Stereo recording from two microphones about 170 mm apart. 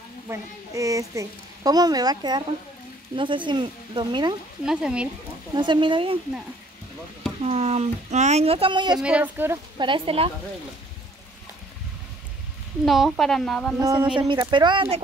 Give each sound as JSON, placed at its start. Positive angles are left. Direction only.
{"t": 0.3, "sound": "a woman's voice", "side_deg": -20}
{"t": 4.6, "sound": "speech", "side_deg": -5}
{"t": 5.5, "sound": "a woman's voice", "side_deg": -25}
{"t": 7.4, "sound": "speech", "side_deg": -40}
{"t": 9.0, "sound": "speech", "side_deg": -10}
{"t": 9.8, "sound": "speech", "side_deg": -30}
{"t": 12.8, "sound": "speech", "side_deg": 0}
{"t": 13.7, "sound": "a woman's voice", "side_deg": -20}